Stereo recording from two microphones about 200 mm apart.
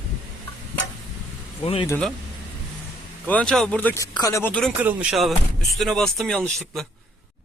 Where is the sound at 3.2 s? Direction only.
5° left (ahead or behind).